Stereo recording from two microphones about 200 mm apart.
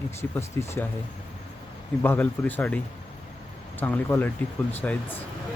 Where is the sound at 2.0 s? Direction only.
10° left (ahead or behind).